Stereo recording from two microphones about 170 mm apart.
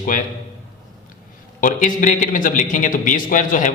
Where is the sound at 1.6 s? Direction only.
50° left (ahead or behind).